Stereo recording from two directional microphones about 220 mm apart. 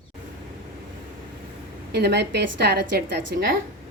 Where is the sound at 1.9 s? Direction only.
50° right (ahead or behind).